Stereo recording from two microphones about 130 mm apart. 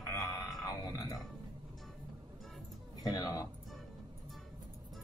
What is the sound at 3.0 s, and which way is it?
Speech, 30° left (ahead or behind).